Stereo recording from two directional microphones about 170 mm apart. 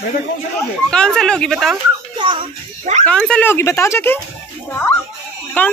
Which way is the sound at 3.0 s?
5° left (ahead or behind).